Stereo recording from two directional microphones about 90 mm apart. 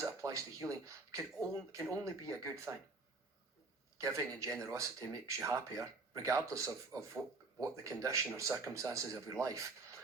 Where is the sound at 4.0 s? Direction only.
35° right (ahead or behind).